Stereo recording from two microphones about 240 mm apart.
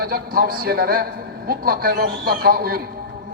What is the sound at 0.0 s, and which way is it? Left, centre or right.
A man's voice, right.